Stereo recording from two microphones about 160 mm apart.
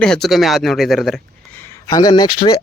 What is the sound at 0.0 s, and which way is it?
Speech, 5° left (ahead or behind).